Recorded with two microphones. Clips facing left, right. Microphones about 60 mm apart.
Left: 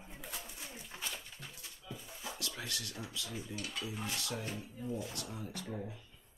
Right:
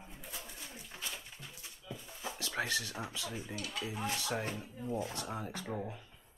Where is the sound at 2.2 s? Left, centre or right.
Right.